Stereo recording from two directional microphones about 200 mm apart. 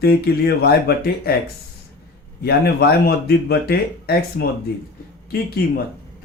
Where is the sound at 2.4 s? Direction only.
55° left (ahead or behind).